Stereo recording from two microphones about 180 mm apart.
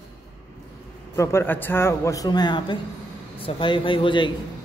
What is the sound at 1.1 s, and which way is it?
A man's voice, 15° left (ahead or behind).